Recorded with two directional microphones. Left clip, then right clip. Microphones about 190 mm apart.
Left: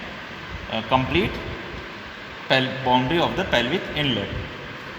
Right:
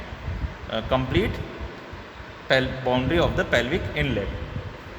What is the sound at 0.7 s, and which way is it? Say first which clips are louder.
Speech: left 3 dB; 30° right (ahead or behind).